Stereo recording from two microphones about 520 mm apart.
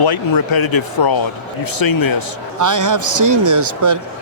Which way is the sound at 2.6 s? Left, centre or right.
Right.